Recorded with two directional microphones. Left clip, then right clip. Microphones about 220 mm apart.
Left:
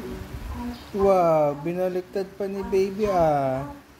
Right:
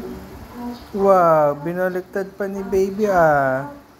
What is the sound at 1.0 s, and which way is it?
Speech, 5° right (ahead or behind).